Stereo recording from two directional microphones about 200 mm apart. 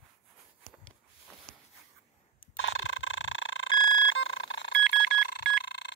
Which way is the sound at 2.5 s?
70° left (ahead or behind).